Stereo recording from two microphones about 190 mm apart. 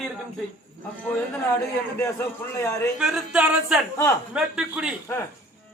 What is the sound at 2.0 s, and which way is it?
Speech, 15° left (ahead or behind).